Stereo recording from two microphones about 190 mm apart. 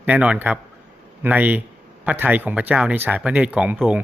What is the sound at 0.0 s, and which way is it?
A man's voice, 5° right (ahead or behind).